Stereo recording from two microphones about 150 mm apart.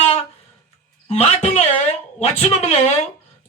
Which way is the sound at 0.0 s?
45° left (ahead or behind).